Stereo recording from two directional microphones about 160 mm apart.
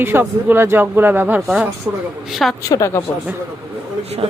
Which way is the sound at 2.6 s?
20° left (ahead or behind).